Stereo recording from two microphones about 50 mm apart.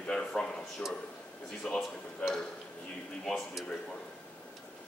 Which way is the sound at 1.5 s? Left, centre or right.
Centre.